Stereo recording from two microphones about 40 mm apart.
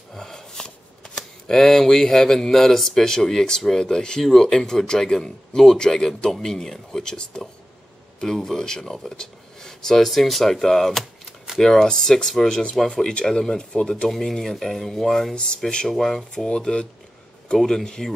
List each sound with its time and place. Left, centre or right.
0.1 s speech: centre
9.1 s a sound: centre
10.0 s speech: centre
15.3 s speech: left